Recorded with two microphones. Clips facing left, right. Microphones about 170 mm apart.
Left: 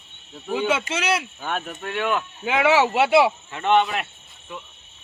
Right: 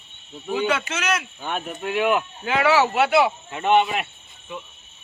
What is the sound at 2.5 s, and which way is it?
Speech, 20° left (ahead or behind).